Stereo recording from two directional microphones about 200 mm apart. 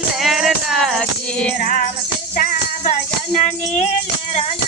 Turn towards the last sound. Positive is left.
turn(degrees=40)  # may be behind; listen again after turning